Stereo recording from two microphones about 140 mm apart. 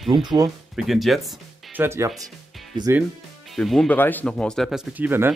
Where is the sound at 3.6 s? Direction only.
5° left (ahead or behind); by 5.3 s 15° right (ahead or behind).